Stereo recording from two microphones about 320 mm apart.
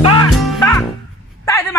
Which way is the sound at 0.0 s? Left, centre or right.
Centre.